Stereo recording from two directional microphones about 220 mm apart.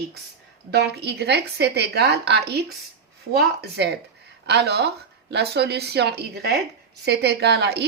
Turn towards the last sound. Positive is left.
turn(degrees=-50)  # may be behind; listen again after turning